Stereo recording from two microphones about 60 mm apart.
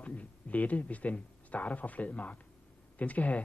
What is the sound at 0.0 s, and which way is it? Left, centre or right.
Speech, left.